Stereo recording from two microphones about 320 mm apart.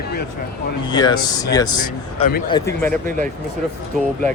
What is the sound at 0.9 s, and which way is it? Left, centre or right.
Speech, centre.